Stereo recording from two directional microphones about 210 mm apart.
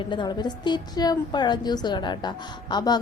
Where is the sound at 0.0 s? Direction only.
20° left (ahead or behind).